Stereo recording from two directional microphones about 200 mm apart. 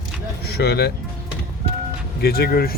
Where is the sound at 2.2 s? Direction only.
50° left (ahead or behind).